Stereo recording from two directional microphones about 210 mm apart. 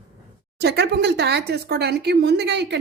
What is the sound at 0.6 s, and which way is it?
Speech, 50° right (ahead or behind).